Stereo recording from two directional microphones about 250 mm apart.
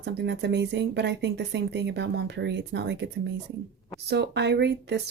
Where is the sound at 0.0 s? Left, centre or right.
Right.